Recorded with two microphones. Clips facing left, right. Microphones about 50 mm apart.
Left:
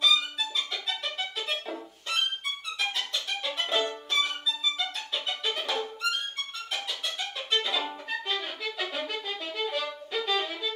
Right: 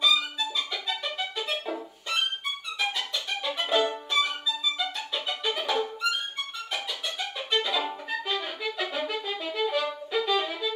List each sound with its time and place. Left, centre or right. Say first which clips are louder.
0.0 s music: right 1 dB; centre
3.4 s music: right 4 dB; centre